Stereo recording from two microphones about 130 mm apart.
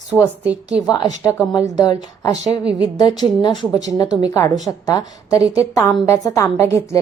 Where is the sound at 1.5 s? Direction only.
30° left (ahead or behind).